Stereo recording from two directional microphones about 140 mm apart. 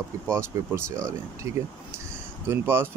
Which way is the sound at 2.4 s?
15° right (ahead or behind).